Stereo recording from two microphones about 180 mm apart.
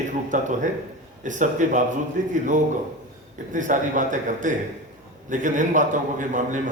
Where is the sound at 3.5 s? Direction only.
45° right (ahead or behind).